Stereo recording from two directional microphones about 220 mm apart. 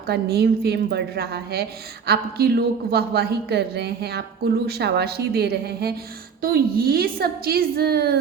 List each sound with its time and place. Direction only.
0.1 s a woman's voice: 45° right (ahead or behind)